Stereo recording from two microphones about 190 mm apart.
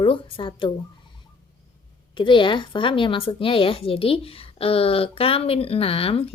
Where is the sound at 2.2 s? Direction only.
25° left (ahead or behind).